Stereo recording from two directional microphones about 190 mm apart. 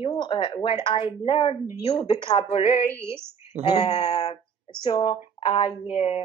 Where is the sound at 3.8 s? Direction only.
35° left (ahead or behind).